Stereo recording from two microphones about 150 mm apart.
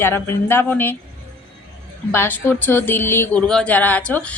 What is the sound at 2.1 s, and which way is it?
A woman's voice, 15° left (ahead or behind).